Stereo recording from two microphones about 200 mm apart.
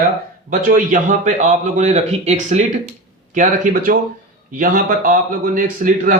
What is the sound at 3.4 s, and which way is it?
Speech, 45° right (ahead or behind).